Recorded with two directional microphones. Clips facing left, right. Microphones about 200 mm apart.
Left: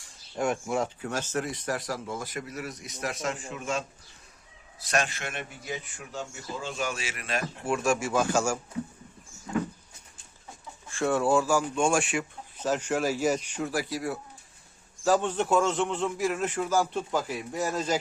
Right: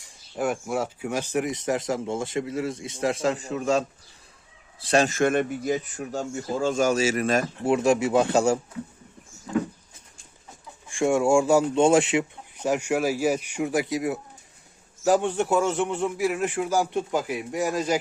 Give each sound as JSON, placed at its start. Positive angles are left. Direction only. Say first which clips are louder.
{"t": 0.3, "sound": "speech", "louder": "right 2 dB", "side_deg": -5}
{"t": 5.0, "sound": "speech", "louder": "right 15 dB", "side_deg": -45}
{"t": 7.7, "sound": "speech", "louder": "right 6 dB", "side_deg": -20}
{"t": 10.8, "sound": "speech", "louder": "right 4 dB", "side_deg": -15}